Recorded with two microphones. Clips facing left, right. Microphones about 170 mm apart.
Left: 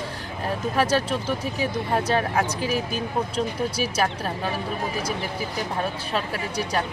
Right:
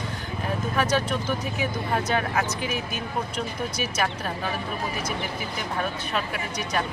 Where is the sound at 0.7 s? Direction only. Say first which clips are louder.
Left 2 dB; 30° left (ahead or behind).